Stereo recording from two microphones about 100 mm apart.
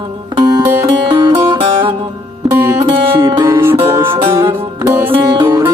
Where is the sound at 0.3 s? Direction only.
45° right (ahead or behind).